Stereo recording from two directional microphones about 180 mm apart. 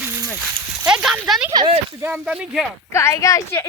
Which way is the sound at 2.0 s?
10° right (ahead or behind).